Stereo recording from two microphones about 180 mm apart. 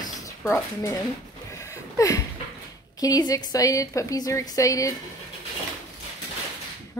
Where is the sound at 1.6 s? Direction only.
15° left (ahead or behind).